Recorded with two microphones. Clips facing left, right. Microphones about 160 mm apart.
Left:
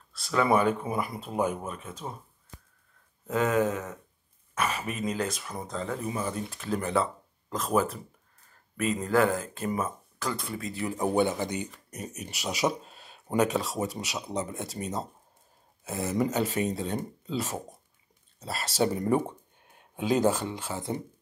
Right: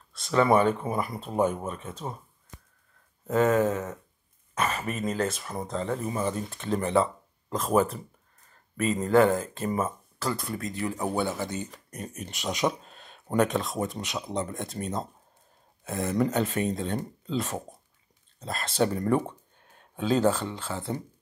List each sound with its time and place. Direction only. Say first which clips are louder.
0.1 s speech: right 3 dB; 5° left (ahead or behind)
3.3 s speech: right 3 dB; centre (ahead or behind)
10.9 s speech: left 4 dB; 15° left (ahead or behind)
12.0 s speech: right 1 dB; 5° left (ahead or behind)